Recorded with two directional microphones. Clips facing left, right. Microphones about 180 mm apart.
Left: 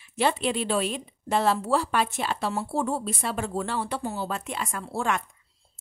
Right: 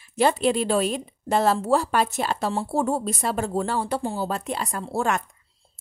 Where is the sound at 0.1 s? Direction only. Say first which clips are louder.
Right 5 dB; 40° right (ahead or behind).